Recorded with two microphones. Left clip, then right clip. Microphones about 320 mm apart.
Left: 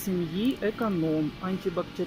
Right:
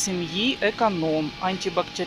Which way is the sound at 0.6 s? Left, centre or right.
Right.